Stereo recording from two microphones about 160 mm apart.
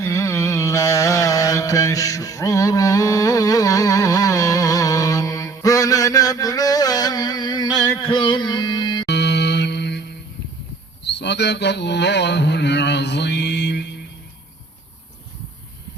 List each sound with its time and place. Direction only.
0.0 s carnatic music: 20° left (ahead or behind)
8.0 s music: 30° left (ahead or behind)
9.0 s music: 90° left
11.0 s speech: 90° left